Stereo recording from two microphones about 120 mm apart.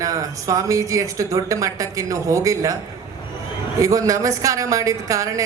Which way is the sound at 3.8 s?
25° right (ahead or behind).